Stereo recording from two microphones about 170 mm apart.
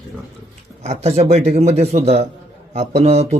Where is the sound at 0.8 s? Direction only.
40° right (ahead or behind).